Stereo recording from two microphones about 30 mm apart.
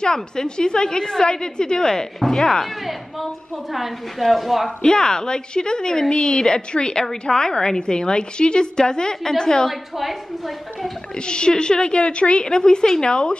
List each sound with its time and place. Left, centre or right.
0.0 s a woman's voice: left
2.1 s speech: centre
2.6 s a woman's voice: centre
4.8 s a woman's voice: left
9.9 s a woman's voice: centre
11.1 s a woman's voice: left
12.4 s a woman's voice: left